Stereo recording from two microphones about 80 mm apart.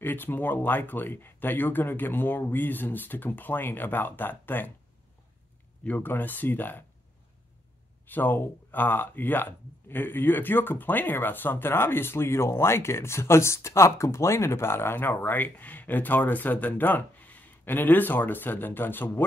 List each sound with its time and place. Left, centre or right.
0.0 s speech: left
5.9 s speech: left
8.1 s speech: left